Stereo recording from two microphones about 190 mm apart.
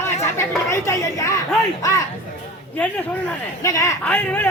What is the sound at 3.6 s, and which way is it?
Speech, 15° left (ahead or behind).